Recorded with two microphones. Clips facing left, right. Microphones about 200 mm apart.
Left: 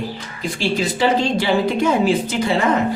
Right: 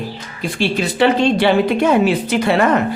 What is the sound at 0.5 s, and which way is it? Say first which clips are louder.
A woman's voice: right 4 dB; 60° right (ahead or behind).